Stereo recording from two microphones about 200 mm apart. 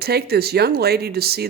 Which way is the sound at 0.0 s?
50° right (ahead or behind).